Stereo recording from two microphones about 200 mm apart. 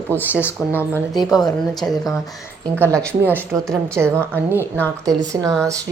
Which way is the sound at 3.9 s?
15° right (ahead or behind).